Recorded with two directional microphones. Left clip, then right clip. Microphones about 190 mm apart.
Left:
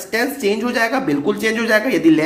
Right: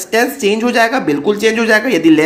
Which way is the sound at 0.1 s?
30° right (ahead or behind).